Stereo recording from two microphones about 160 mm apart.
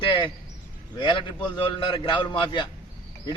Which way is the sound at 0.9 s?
30° left (ahead or behind).